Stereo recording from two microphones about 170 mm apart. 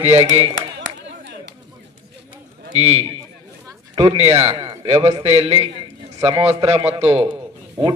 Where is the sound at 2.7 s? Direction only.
40° right (ahead or behind).